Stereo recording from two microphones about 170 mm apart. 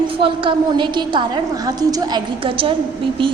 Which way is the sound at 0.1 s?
30° right (ahead or behind).